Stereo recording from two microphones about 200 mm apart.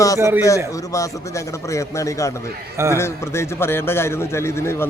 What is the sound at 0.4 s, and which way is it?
A man's voice, 15° left (ahead or behind).